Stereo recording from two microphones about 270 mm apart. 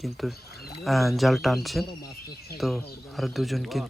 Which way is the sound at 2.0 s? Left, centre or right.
Left.